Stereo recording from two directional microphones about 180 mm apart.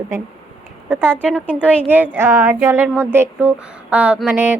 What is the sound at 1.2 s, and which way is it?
Speech, 5° left (ahead or behind).